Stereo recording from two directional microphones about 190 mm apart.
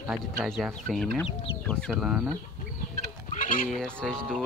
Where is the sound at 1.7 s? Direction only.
5° left (ahead or behind).